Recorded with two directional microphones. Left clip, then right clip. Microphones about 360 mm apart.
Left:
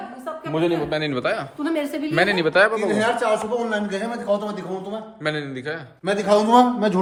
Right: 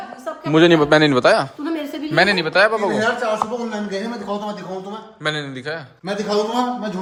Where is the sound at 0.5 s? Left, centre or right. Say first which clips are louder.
Right 10 dB; right; by 2.7 s centre.